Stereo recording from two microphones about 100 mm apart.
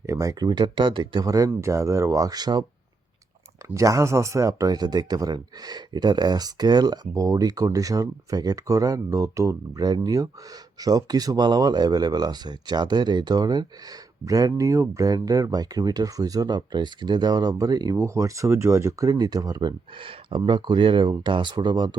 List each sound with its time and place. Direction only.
0.0 s speech: 30° right (ahead or behind); by 1.2 s 55° right (ahead or behind)
1.2 s speech: 35° right (ahead or behind)
3.8 s speech: 30° right (ahead or behind)
20.0 s speech: 60° right (ahead or behind)